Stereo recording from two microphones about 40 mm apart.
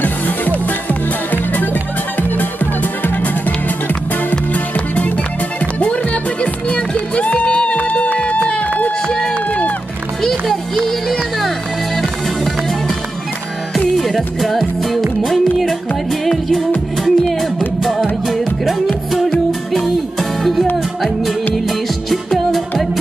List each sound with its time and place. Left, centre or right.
0.0 s music: left
4.7 s music: left
6.4 s music: left
9.0 s run: left
10.2 s music: centre
13.7 s music: centre
20.2 s music: centre
21.6 s music: centre